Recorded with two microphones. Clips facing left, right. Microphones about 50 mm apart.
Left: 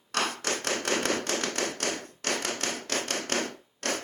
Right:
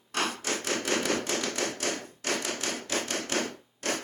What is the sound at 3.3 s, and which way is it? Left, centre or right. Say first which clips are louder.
Rub: even; left.